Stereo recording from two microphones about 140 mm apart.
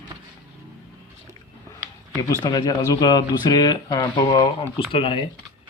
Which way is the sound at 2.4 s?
30° left (ahead or behind).